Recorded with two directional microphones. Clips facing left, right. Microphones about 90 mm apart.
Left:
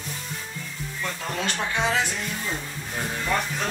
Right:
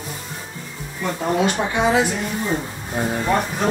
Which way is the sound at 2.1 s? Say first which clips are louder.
Right 7 dB; 30° right (ahead or behind).